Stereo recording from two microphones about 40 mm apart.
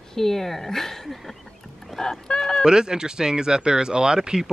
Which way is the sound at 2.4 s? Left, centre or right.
Centre.